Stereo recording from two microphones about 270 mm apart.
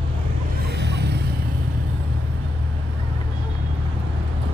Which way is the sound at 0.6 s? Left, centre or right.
Right.